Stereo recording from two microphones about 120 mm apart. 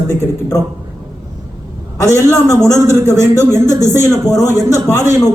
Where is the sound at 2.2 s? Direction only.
20° right (ahead or behind).